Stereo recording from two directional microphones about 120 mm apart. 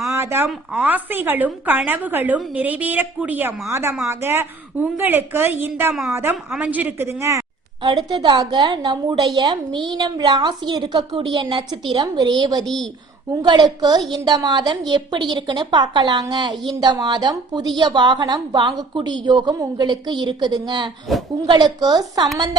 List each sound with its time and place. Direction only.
0.2 s a woman's voice: 20° right (ahead or behind)
5.9 s a woman's voice: centre (ahead or behind)
6.6 s a woman's voice: 15° right (ahead or behind)
7.8 s a woman's voice: 40° right (ahead or behind)
12.6 s a woman's voice: centre (ahead or behind)
13.4 s a woman's voice: 40° right (ahead or behind)